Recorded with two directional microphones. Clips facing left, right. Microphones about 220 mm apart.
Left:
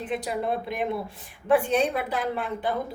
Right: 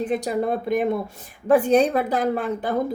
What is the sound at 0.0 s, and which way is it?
Speech, 45° right (ahead or behind).